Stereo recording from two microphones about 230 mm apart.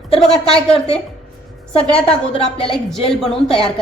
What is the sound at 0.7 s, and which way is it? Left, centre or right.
A woman's voice, left.